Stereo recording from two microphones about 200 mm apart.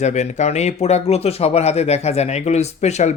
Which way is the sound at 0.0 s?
35° left (ahead or behind).